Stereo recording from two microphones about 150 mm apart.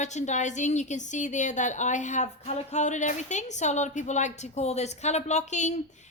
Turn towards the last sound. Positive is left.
turn(degrees=50)  # may be behind; listen again after turning